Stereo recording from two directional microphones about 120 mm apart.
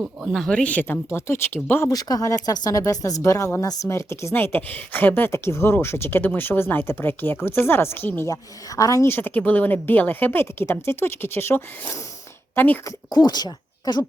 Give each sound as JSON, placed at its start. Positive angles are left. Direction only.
{"t": 0.0, "sound": "speech", "side_deg": -5}
{"t": 1.9, "sound": "speech", "side_deg": 30}
{"t": 8.3, "sound": "speech", "side_deg": 30}
{"t": 13.1, "sound": "speech", "side_deg": 35}